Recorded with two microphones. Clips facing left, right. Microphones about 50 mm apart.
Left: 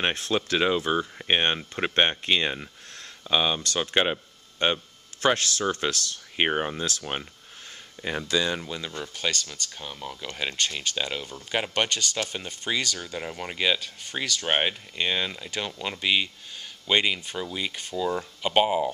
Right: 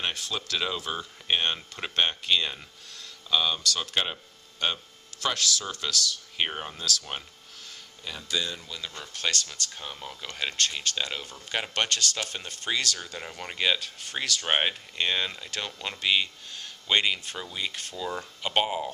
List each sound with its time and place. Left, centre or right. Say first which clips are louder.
0.0 s speech: left 6 dB; left
8.0 s speech: left 9 dB; left
8.3 s speech: left 5 dB; left
8.8 s speech: right 2 dB; centre